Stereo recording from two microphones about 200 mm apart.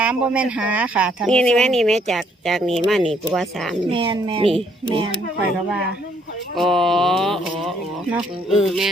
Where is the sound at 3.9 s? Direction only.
25° right (ahead or behind).